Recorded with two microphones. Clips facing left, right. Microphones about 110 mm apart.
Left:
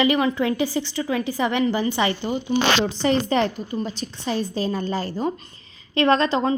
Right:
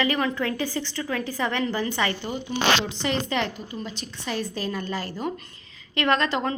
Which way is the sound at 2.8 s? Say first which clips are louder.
Left 6 dB; 40° left (ahead or behind).